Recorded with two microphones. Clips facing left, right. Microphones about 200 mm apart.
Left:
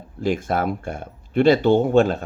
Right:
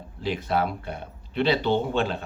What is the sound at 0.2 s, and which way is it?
Speech, 45° left (ahead or behind).